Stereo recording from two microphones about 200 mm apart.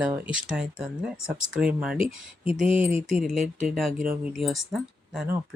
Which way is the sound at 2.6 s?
40° right (ahead or behind).